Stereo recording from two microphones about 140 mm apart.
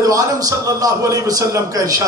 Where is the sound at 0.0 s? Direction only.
25° right (ahead or behind).